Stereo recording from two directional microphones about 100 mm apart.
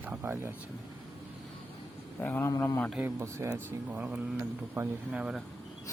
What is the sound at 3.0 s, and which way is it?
Speech, 25° right (ahead or behind).